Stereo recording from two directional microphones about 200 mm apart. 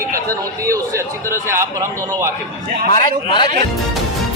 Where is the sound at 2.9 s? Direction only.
25° left (ahead or behind).